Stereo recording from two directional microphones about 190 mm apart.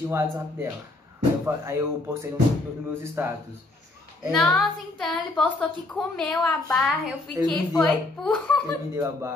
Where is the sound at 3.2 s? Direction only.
10° right (ahead or behind).